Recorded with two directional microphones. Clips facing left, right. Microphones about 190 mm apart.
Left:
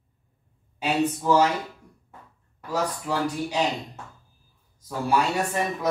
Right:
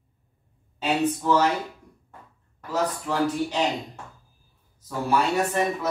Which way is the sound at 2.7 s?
10° left (ahead or behind).